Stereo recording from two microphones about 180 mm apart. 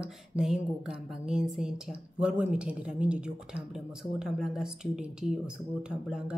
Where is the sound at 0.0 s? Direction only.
5° right (ahead or behind).